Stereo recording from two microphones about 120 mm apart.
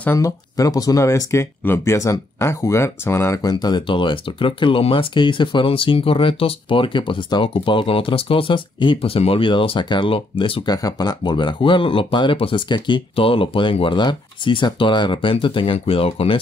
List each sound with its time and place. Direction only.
0.2 s speech: 30° left (ahead or behind)
3.4 s speech: 35° left (ahead or behind)
10.8 s speech: 35° left (ahead or behind); by 16.3 s 50° left (ahead or behind)